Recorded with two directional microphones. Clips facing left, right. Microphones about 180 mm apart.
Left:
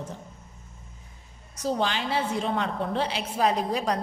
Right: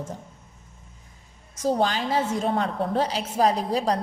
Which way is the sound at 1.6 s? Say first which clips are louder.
Right 4 dB; 45° right (ahead or behind).